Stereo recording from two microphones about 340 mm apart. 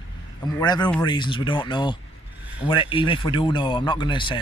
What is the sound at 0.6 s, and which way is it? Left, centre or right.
Speech, centre.